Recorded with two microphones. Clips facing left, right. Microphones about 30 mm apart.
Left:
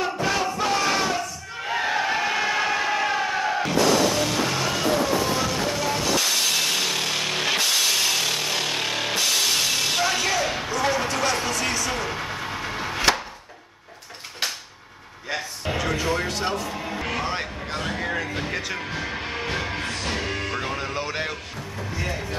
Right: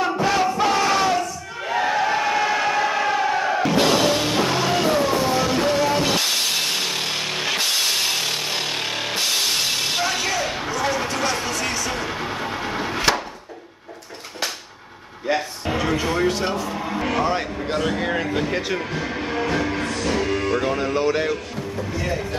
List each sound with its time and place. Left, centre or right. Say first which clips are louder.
0.0 s battle cry: right 4 dB; centre
3.7 s music: right 1 dB; right
6.4 s vehicle: even; centre
8.0 s music: even; centre
9.2 s music: right 1 dB; centre
15.8 s music: right 4 dB; centre
17.6 s speech: right 6 dB; centre
18.7 s speech: right 4 dB; centre
19.5 s music: right 5 dB; centre